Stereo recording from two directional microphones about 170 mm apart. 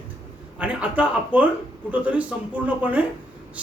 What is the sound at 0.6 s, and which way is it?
A man's voice, 10° right (ahead or behind).